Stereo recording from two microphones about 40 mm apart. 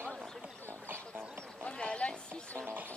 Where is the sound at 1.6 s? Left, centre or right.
Left.